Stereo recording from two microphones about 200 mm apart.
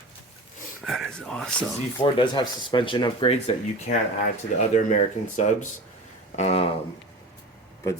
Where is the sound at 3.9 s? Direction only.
35° left (ahead or behind).